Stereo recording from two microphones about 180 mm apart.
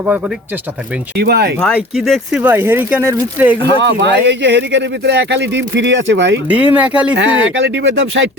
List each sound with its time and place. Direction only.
1.1 s speech: 65° right (ahead or behind)
1.5 s speech: 5° left (ahead or behind)
2.4 s speech: 10° right (ahead or behind)
4.0 s speech: 75° right (ahead or behind)
6.5 s speech: 10° right (ahead or behind)
7.2 s speech: 90° right